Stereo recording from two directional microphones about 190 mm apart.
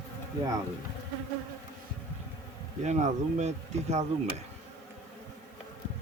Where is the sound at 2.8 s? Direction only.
40° right (ahead or behind).